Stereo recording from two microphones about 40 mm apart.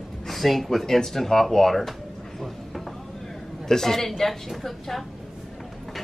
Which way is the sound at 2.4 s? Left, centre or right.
Centre.